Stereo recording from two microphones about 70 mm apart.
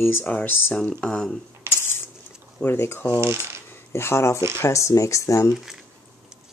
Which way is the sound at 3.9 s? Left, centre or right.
Left.